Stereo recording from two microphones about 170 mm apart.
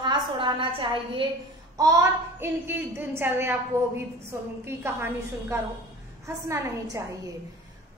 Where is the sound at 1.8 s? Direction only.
20° right (ahead or behind).